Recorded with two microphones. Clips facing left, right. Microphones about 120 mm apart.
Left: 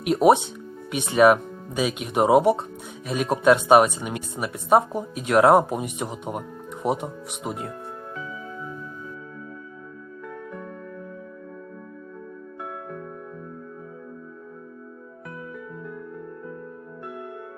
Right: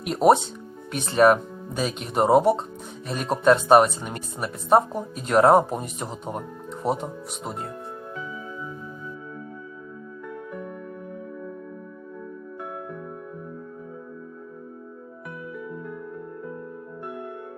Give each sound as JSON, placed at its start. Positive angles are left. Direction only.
{"t": 0.0, "sound": "speech", "side_deg": 5}